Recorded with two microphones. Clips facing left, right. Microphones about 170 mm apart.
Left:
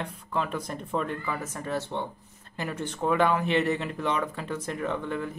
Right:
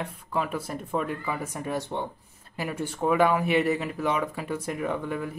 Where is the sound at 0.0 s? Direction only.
10° right (ahead or behind).